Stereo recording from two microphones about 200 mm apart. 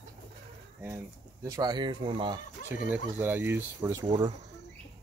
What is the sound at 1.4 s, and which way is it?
Speech, 20° right (ahead or behind).